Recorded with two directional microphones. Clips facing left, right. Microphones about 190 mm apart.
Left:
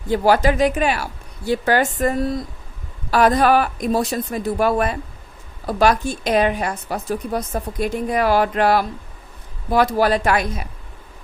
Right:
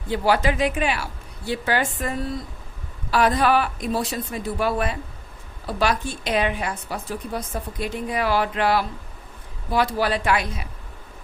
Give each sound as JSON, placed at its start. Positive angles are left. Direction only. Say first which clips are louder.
{"t": 0.1, "sound": "a woman's voice", "louder": "left 5 dB", "side_deg": 45}